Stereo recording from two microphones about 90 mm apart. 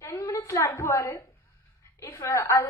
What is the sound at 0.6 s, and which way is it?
A woman's voice, 30° left (ahead or behind).